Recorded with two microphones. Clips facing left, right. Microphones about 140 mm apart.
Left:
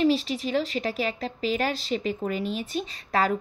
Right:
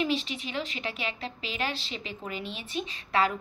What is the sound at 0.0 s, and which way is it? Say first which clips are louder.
A woman's voice: left 7 dB; 40° left (ahead or behind).